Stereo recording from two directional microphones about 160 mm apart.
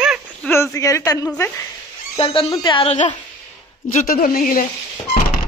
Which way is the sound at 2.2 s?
35° left (ahead or behind).